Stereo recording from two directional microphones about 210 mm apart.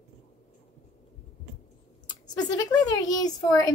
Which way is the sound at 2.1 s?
20° left (ahead or behind).